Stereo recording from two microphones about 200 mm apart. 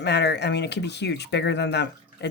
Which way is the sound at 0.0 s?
60° left (ahead or behind).